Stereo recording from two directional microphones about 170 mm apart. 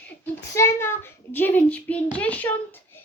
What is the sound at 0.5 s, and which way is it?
A child's voice, 15° left (ahead or behind).